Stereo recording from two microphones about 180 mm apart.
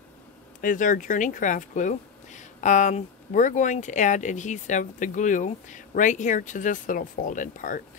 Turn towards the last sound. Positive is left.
turn(degrees=45)  # may be behind; listen again after turning